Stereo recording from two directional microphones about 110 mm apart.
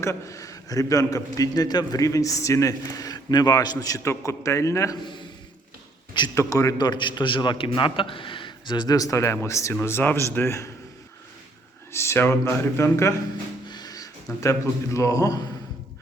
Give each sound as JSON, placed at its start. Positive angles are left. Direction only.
{"t": 0.0, "sound": "a man's voice", "side_deg": 25}
{"t": 6.3, "sound": "a man's voice", "side_deg": 30}
{"t": 11.9, "sound": "speech", "side_deg": 25}
{"t": 13.7, "sound": "speech", "side_deg": 35}